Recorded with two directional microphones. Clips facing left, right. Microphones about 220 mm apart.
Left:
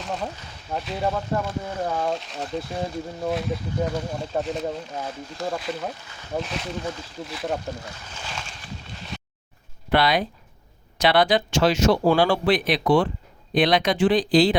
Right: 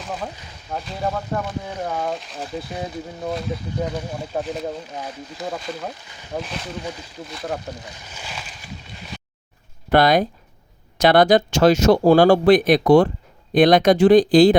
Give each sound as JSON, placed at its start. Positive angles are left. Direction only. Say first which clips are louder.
{"t": 0.0, "sound": "speech", "louder": "even", "side_deg": 0}
{"t": 7.9, "sound": "boat", "louder": "even", "side_deg": -15}
{"t": 9.9, "sound": "speech", "louder": "right 5 dB", "side_deg": -45}